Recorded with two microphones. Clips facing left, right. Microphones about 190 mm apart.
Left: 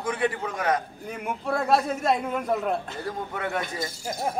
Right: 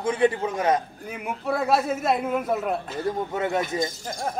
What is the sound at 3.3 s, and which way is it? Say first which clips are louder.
Speech: right 5 dB; 25° right (ahead or behind).